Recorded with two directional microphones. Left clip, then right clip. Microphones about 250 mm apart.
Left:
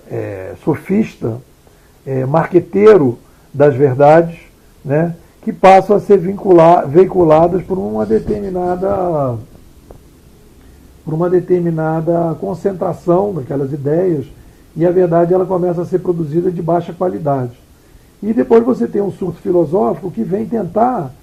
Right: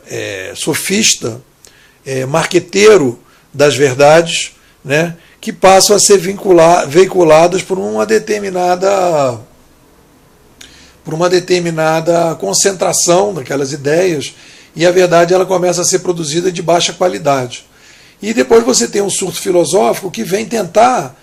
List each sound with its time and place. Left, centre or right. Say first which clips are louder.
0.1 s speech: right 2 dB; right
11.0 s a man's voice: right 3 dB; right